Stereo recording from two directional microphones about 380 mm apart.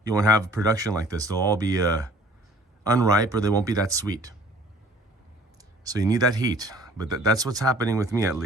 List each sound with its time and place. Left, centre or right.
0.0 s speech: centre
5.8 s speech: centre